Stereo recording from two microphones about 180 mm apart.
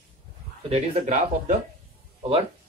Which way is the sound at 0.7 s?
40° right (ahead or behind).